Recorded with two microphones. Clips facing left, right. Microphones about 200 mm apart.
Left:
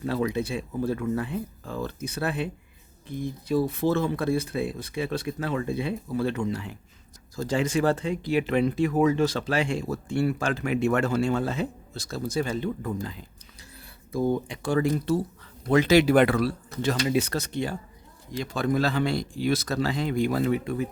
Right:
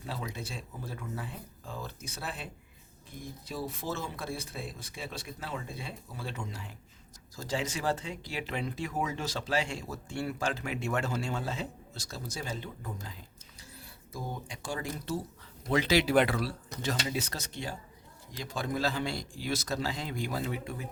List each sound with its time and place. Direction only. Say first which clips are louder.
0.0 s speech: left 13 dB; 60° left (ahead or behind)
3.5 s speech: left 13 dB; 60° left (ahead or behind)
15.7 s speech: left 7 dB; 50° left (ahead or behind)